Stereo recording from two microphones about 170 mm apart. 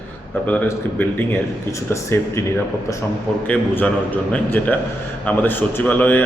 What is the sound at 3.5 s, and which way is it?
Speech, 10° left (ahead or behind).